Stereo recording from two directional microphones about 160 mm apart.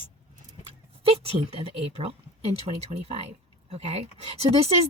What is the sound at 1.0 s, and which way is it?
Speech, 35° right (ahead or behind).